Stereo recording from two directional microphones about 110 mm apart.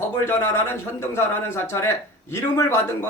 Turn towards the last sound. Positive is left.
turn(degrees=25)  # may be behind; listen again after turning